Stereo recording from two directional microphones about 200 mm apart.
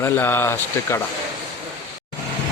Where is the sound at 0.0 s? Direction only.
10° left (ahead or behind).